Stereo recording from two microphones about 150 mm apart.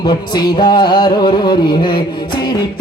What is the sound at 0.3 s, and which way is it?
Music, 30° left (ahead or behind).